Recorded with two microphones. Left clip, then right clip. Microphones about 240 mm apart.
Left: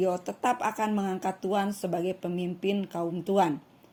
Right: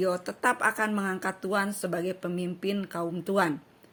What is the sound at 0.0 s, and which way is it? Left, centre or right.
Speech, right.